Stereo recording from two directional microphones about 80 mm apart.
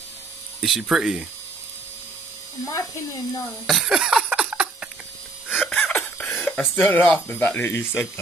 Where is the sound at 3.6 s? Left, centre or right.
Centre.